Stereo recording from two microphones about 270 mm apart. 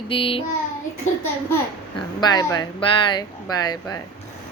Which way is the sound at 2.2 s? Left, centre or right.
Centre.